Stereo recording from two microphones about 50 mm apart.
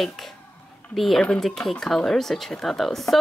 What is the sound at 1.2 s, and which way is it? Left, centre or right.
Speech, centre.